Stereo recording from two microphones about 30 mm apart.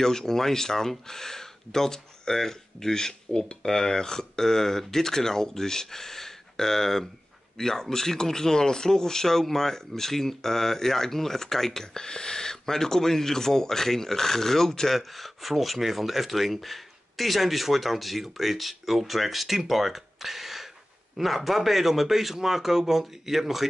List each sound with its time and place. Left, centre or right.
0.0 s speech: centre
14.9 s a man's voice: centre